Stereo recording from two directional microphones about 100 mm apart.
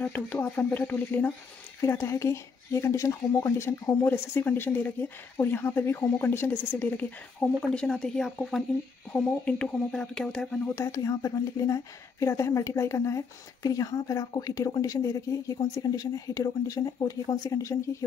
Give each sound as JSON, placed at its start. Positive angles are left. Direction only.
{"t": 0.0, "sound": "speech", "side_deg": 15}
{"t": 1.8, "sound": "speech", "side_deg": 30}
{"t": 7.3, "sound": "speech", "side_deg": 10}
{"t": 10.9, "sound": "a woman's voice", "side_deg": 35}